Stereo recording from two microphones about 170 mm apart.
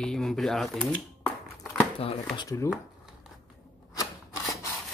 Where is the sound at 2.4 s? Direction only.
20° left (ahead or behind).